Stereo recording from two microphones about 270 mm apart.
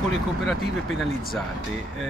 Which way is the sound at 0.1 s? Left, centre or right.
Centre.